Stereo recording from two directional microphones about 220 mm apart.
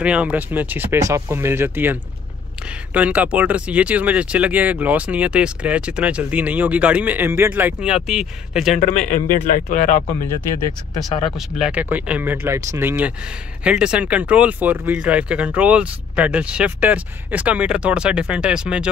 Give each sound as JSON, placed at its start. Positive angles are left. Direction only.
{"t": 0.0, "sound": "speech", "side_deg": -5}
{"t": 8.7, "sound": "speech", "side_deg": 35}
{"t": 11.3, "sound": "speech", "side_deg": 0}